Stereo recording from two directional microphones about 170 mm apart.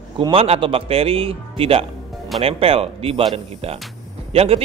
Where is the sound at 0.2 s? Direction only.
35° right (ahead or behind).